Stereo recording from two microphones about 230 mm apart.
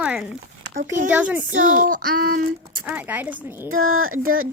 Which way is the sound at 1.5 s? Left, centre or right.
Right.